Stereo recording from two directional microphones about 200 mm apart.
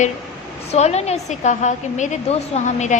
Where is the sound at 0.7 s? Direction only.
35° left (ahead or behind).